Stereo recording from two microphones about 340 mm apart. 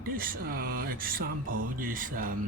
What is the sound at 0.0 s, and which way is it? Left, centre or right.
Speech, right.